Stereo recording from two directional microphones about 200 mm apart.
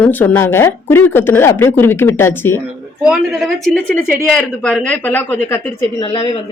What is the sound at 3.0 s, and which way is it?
Speech, centre (ahead or behind).